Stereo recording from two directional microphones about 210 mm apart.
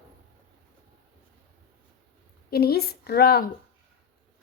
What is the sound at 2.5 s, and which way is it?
Speech, 50° left (ahead or behind).